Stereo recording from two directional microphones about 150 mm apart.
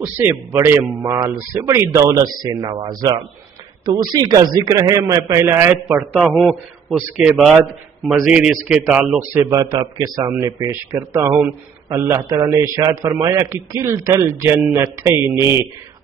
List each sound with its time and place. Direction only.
0.0 s a man's voice: 15° right (ahead or behind)
5.9 s a man's voice: 5° right (ahead or behind)
9.3 s a man's voice: 25° right (ahead or behind)